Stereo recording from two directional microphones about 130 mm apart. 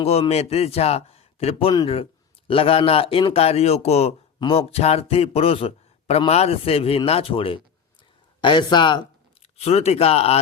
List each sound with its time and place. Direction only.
0.0 s a man's voice: 50° left (ahead or behind)
4.4 s a man's voice: 45° left (ahead or behind)
9.6 s a man's voice: 55° left (ahead or behind)